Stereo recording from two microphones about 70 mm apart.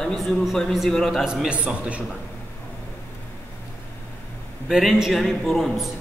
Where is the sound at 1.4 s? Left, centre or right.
Centre.